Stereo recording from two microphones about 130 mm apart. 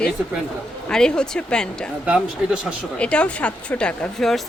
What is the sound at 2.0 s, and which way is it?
Speech, 10° right (ahead or behind).